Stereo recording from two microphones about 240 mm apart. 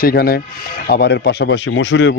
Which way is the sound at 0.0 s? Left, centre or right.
Left.